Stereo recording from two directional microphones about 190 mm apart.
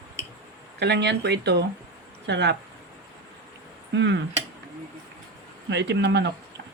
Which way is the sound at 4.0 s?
65° right (ahead or behind).